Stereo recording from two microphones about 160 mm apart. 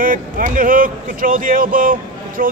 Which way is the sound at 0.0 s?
60° right (ahead or behind).